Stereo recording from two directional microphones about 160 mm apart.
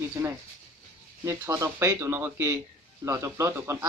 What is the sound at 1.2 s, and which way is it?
Speech, 20° right (ahead or behind).